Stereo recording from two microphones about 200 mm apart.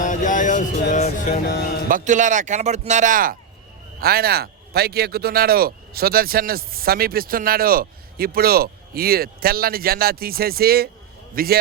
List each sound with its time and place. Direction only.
0.0 s a sound: 40° left (ahead or behind)
0.8 s speech: 40° left (ahead or behind)
1.9 s speech: 40° right (ahead or behind)